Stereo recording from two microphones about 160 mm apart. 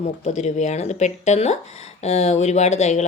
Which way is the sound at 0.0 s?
45° left (ahead or behind).